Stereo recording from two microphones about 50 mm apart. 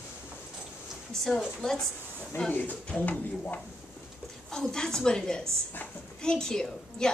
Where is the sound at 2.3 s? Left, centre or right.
Left.